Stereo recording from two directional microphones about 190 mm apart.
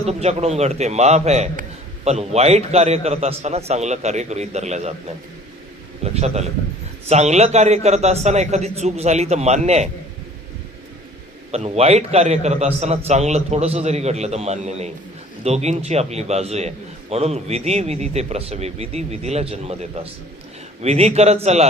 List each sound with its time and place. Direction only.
0.0 s a man's voice: 35° right (ahead or behind)
11.5 s a man's voice: 35° right (ahead or behind)